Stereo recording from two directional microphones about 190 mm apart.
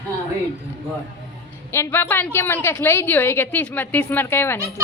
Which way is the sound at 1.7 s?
15° left (ahead or behind).